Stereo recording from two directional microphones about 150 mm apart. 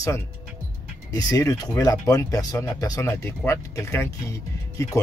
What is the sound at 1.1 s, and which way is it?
Speech, 20° left (ahead or behind).